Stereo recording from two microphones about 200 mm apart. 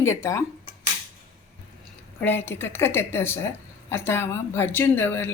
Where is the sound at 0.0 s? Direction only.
15° left (ahead or behind).